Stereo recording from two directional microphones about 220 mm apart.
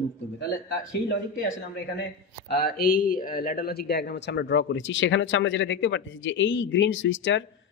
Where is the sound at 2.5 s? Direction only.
45° left (ahead or behind); by 7.4 s 60° left (ahead or behind).